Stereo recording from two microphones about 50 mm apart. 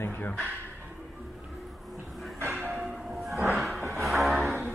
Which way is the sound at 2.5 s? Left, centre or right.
Right.